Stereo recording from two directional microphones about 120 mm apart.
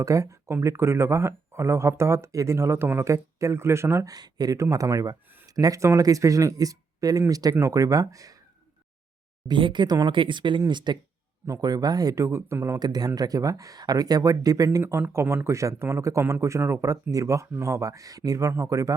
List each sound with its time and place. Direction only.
0.0 s speech: 25° right (ahead or behind)
9.5 s speech: 40° right (ahead or behind)